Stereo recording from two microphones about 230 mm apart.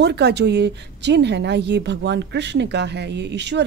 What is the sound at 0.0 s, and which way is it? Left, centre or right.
Speech, right.